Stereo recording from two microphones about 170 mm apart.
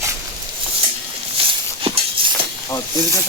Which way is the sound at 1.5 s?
30° right (ahead or behind).